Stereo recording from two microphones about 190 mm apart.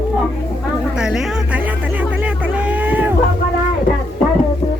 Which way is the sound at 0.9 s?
5° right (ahead or behind).